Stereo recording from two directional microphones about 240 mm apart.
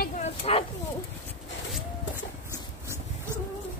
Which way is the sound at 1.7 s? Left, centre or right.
Centre.